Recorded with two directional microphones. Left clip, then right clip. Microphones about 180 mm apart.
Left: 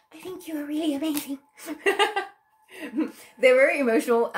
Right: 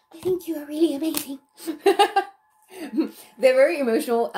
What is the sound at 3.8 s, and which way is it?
Speech, 40° right (ahead or behind).